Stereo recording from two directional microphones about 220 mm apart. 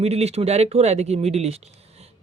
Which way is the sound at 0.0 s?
30° right (ahead or behind).